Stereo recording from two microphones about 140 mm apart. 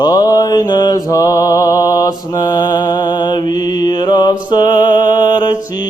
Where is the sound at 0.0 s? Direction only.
30° left (ahead or behind).